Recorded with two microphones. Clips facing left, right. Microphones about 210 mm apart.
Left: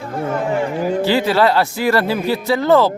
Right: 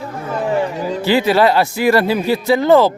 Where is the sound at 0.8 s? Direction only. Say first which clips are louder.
Left 3 dB; 50° left (ahead or behind).